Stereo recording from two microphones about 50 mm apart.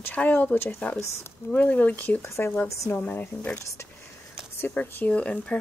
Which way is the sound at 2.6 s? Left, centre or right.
Left.